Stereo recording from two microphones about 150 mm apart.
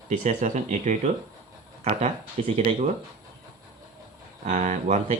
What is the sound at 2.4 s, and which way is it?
Speech, 45° right (ahead or behind).